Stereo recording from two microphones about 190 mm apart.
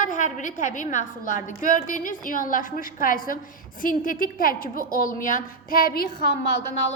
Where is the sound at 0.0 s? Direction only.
40° left (ahead or behind).